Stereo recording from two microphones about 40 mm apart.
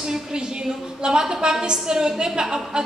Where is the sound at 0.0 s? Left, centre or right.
Centre.